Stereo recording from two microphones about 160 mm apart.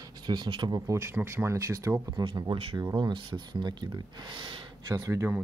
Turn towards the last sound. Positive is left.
turn(degrees=-15)  # may be behind; listen again after turning